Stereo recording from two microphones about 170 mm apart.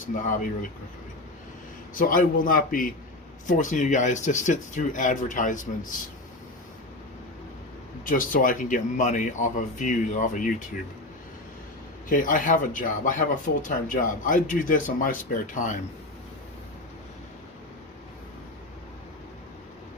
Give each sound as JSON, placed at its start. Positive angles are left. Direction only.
{"t": 2.0, "sound": "a man's voice", "side_deg": 55}
{"t": 8.0, "sound": "speech", "side_deg": 55}
{"t": 12.0, "sound": "speech", "side_deg": 50}